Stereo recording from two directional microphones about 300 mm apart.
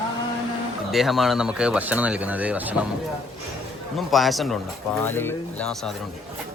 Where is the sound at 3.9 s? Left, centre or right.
Centre.